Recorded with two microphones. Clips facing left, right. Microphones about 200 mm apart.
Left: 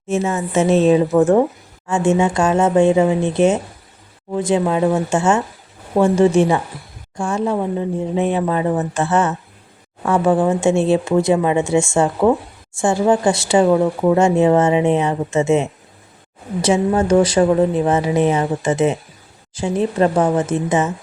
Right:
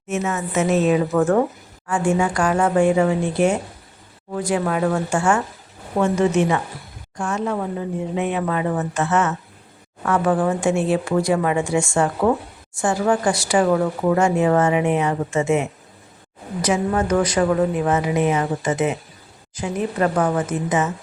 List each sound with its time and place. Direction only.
0.1 s speech: 30° left (ahead or behind)